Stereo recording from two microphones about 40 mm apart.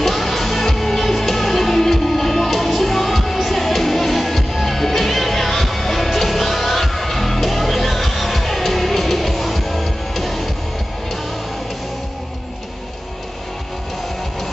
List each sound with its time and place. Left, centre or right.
0.0 s music: centre